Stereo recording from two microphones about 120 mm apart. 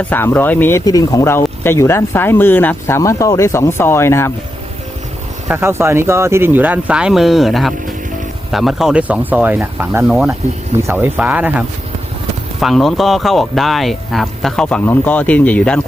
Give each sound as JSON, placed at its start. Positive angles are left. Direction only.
{"t": 0.0, "sound": "speech", "side_deg": 15}
{"t": 0.9, "sound": "speech", "side_deg": 30}
{"t": 5.5, "sound": "speech", "side_deg": -20}
{"t": 12.5, "sound": "speech", "side_deg": 0}